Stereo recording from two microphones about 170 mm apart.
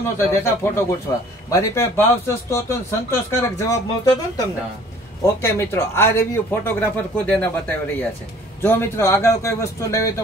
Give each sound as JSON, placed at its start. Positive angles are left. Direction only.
{"t": 0.0, "sound": "speech", "side_deg": 15}
{"t": 5.2, "sound": "speech", "side_deg": 15}